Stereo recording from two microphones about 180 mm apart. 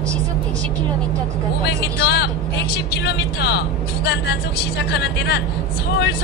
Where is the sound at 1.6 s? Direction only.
65° left (ahead or behind).